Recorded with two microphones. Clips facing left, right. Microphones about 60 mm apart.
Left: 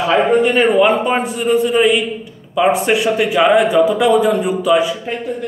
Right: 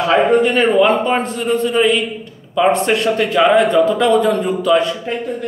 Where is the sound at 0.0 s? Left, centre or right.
Centre.